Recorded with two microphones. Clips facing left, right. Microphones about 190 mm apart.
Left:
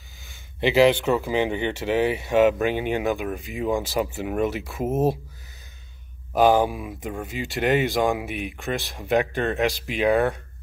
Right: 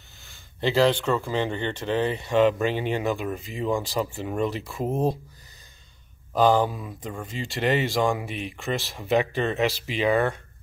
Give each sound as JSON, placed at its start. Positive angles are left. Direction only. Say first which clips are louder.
{"t": 0.6, "sound": "speech", "louder": "left 3 dB", "side_deg": 20}
{"t": 0.9, "sound": "speech", "louder": "left 3 dB", "side_deg": 5}
{"t": 6.3, "sound": "speech", "louder": "left 2 dB", "side_deg": 10}